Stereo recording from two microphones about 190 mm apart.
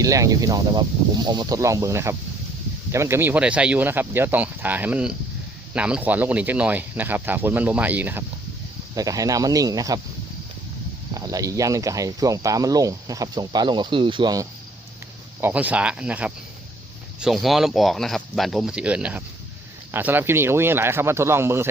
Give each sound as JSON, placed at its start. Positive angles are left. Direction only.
{"t": 0.0, "sound": "speech", "side_deg": -15}
{"t": 11.1, "sound": "speech", "side_deg": -20}
{"t": 15.4, "sound": "speech", "side_deg": -10}